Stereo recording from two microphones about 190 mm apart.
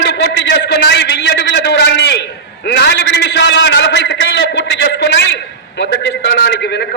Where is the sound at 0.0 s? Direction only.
65° left (ahead or behind).